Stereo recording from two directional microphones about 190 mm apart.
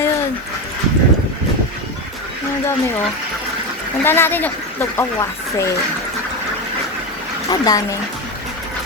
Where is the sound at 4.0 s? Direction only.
10° left (ahead or behind).